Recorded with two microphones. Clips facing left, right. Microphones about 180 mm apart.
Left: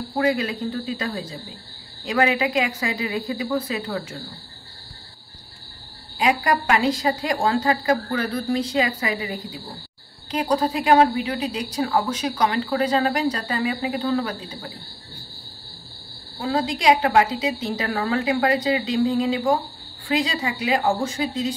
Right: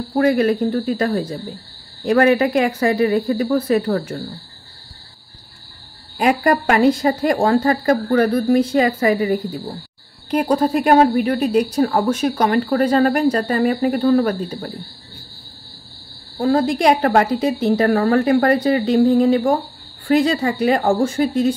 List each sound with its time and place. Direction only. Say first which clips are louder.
0.2 s a woman's voice: right 7 dB; 55° right (ahead or behind)
6.1 s a woman's voice: right 5 dB; 55° right (ahead or behind)
16.3 s a woman's voice: right 8 dB; 50° right (ahead or behind)